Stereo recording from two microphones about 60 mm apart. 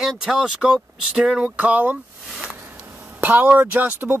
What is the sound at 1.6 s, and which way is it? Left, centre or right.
Speech, right.